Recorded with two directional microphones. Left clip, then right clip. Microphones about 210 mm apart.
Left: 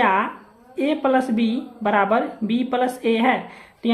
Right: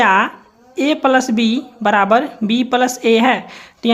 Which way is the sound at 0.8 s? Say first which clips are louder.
Right 6 dB; 35° right (ahead or behind).